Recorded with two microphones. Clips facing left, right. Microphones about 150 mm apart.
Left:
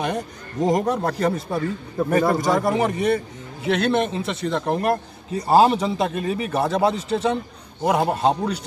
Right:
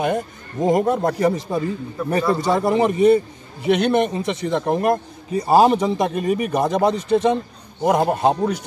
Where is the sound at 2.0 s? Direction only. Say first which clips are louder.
Even; 25° right (ahead or behind).